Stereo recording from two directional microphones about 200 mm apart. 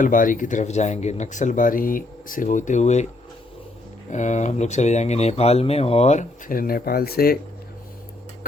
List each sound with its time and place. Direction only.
0.0 s speech: 40° left (ahead or behind)
4.1 s speech: 35° left (ahead or behind)